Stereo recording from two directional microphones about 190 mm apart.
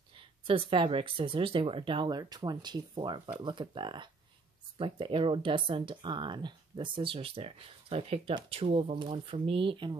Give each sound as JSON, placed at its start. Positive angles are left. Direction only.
{"t": 0.5, "sound": "speech", "side_deg": -30}